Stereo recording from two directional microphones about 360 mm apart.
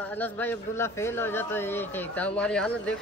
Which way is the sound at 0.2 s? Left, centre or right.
Centre.